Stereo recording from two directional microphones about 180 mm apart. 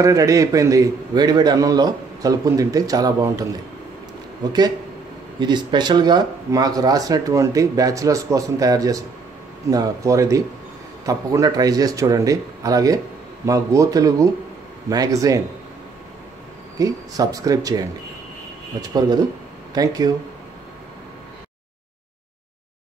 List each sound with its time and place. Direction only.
0.0 s speech: 20° right (ahead or behind)
4.5 s speech: 20° right (ahead or behind)
16.7 s speech: 20° right (ahead or behind)